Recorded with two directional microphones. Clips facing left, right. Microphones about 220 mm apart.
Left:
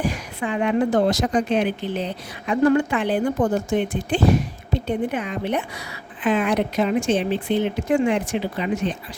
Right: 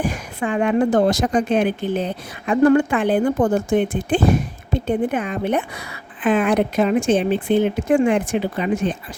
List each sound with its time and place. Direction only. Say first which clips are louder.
0.0 s a woman's voice: right 2 dB; 50° right (ahead or behind)